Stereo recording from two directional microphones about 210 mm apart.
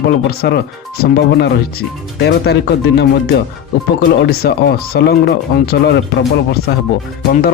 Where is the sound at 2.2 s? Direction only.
50° left (ahead or behind).